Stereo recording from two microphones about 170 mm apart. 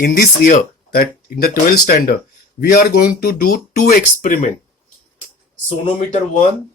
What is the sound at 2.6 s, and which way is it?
Speech, 55° left (ahead or behind).